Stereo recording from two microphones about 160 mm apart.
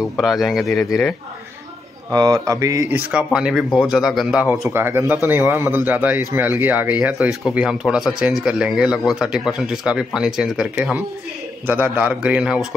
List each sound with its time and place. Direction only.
0.2 s speech: centre (ahead or behind)
2.0 s speech: 25° right (ahead or behind)
3.0 s a man's voice: 5° right (ahead or behind)